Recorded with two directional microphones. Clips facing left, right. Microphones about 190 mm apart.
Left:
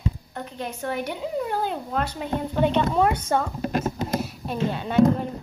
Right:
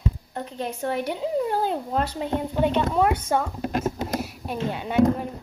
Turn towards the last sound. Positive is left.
turn(degrees=-15)  # may be behind; listen again after turning